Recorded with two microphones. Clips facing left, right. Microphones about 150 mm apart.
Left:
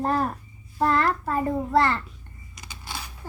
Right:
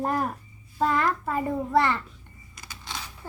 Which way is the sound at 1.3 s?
15° right (ahead or behind).